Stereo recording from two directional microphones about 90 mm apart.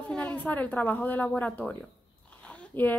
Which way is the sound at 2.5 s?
15° left (ahead or behind).